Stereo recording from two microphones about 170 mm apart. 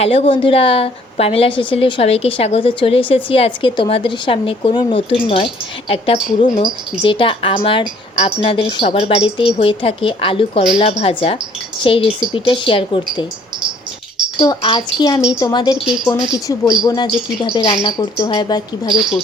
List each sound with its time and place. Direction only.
0.0 s a woman's voice: 35° left (ahead or behind)
7.0 s a woman's voice: 30° left (ahead or behind)
14.3 s speech: 25° left (ahead or behind)